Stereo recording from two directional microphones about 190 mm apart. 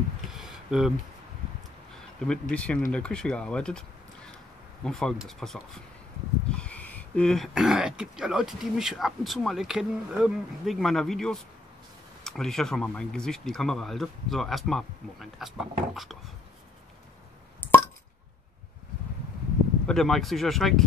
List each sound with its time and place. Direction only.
0.3 s a sound: 5° right (ahead or behind)
2.1 s speech: 5° left (ahead or behind)
17.6 s plop: 10° left (ahead or behind)
19.9 s speech: centre (ahead or behind)